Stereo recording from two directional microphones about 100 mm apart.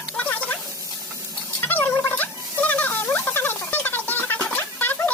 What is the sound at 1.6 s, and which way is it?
Gargling, 20° left (ahead or behind).